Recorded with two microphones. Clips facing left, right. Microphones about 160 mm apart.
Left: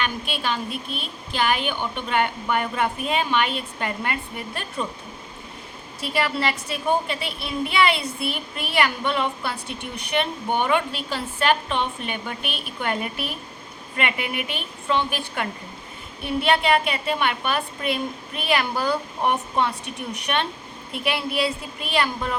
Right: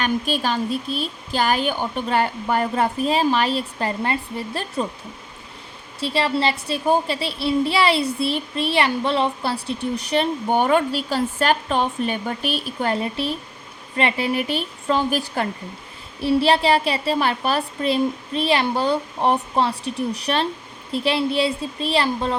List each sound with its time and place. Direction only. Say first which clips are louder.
0.0 s a child's voice: right 5 dB; 40° right (ahead or behind)
6.0 s a child's voice: right 3 dB; 30° right (ahead or behind)